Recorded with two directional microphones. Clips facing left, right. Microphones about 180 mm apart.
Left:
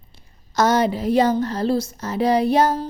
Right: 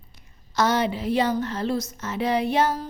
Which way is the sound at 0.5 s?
45° left (ahead or behind).